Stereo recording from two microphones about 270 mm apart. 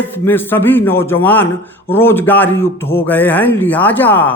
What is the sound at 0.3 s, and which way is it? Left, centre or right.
A man's voice, centre.